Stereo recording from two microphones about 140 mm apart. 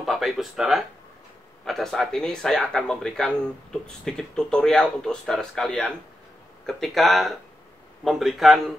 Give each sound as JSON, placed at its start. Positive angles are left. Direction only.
{"t": 0.0, "sound": "speech", "side_deg": 0}